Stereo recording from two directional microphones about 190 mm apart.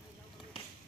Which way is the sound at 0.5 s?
30° left (ahead or behind).